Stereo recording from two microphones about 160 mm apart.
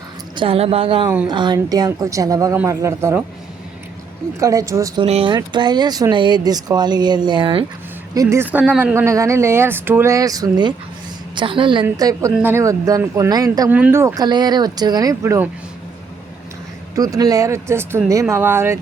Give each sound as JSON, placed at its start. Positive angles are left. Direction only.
{"t": 0.3, "sound": "a woman's voice", "side_deg": -35}
{"t": 4.4, "sound": "speech", "side_deg": -20}
{"t": 5.0, "sound": "a woman's voice", "side_deg": -40}
{"t": 5.3, "sound": "speech", "side_deg": -30}
{"t": 8.1, "sound": "a woman's voice", "side_deg": -20}
{"t": 13.7, "sound": "speech", "side_deg": -10}
{"t": 16.9, "sound": "a woman's voice", "side_deg": -20}